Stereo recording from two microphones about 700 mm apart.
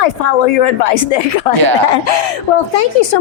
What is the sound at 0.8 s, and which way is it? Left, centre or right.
Speech, left.